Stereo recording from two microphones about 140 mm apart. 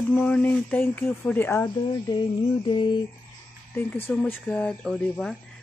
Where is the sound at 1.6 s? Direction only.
30° left (ahead or behind).